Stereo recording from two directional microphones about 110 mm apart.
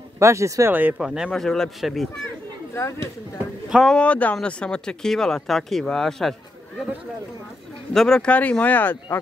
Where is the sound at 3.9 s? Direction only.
10° left (ahead or behind).